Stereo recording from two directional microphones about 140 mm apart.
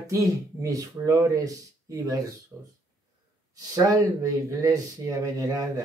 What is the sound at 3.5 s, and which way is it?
A man's voice, 25° right (ahead or behind).